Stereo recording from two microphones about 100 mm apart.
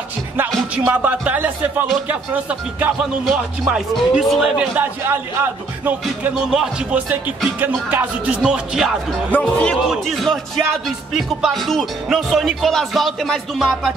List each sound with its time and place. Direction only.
0.8 s speech: 15° right (ahead or behind)
3.3 s music: 5° right (ahead or behind)
4.6 s speech: 20° right (ahead or behind)
6.3 s speech: 5° right (ahead or behind)
7.6 s speech: 15° right (ahead or behind)
8.4 s music: 5° right (ahead or behind)
9.3 s speech: 10° left (ahead or behind)
9.8 s music: centre (ahead or behind)